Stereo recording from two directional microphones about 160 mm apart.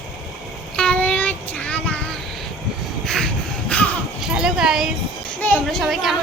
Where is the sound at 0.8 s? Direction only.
5° left (ahead or behind).